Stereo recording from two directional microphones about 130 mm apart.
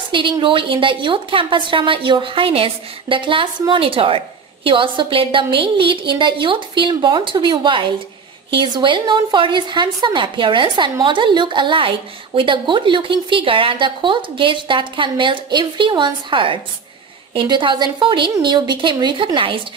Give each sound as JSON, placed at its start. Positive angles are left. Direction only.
{"t": 0.1, "sound": "speech", "side_deg": -40}